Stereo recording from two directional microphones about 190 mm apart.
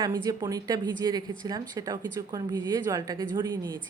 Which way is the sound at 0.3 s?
20° right (ahead or behind).